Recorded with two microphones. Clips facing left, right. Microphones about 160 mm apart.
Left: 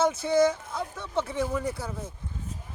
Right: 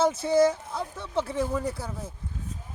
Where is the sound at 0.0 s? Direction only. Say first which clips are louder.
Right 1 dB; 30° right (ahead or behind).